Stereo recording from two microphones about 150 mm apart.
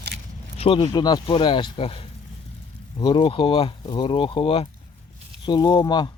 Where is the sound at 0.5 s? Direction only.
40° left (ahead or behind).